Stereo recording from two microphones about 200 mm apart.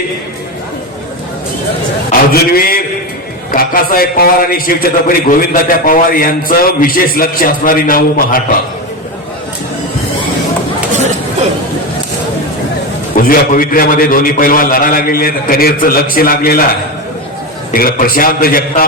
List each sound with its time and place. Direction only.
2.3 s a man's voice: 45° left (ahead or behind)
13.1 s a man's voice: 45° left (ahead or behind)
17.7 s a man's voice: 45° left (ahead or behind)